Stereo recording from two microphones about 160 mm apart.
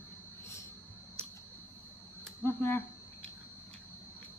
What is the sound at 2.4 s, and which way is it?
Speech, 15° left (ahead or behind).